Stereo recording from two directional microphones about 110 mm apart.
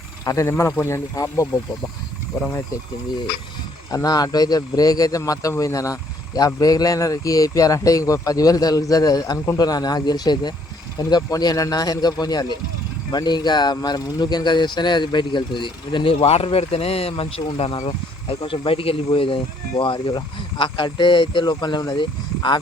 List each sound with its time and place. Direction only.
0.3 s speech: 25° left (ahead or behind)
3.9 s speech: 35° left (ahead or behind)
16.2 s speech: 65° left (ahead or behind); by 22.6 s 45° left (ahead or behind)